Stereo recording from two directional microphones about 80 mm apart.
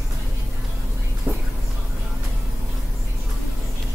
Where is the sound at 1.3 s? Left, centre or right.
Right.